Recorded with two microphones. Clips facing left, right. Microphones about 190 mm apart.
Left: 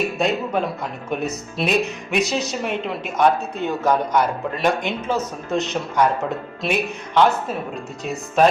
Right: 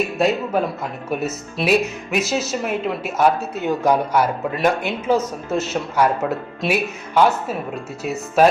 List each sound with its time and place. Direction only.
0.2 s speech: 5° right (ahead or behind)